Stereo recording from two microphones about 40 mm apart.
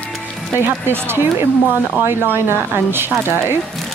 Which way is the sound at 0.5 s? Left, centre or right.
Right.